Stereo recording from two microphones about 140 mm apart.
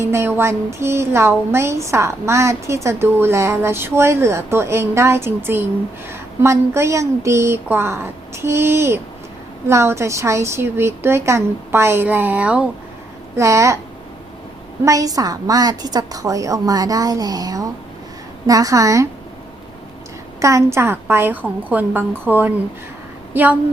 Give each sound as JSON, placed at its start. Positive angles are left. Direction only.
{"t": 0.0, "sound": "a woman's voice", "side_deg": -20}
{"t": 13.3, "sound": "speech", "side_deg": -20}
{"t": 14.8, "sound": "speech", "side_deg": -25}
{"t": 20.4, "sound": "a woman's voice", "side_deg": -20}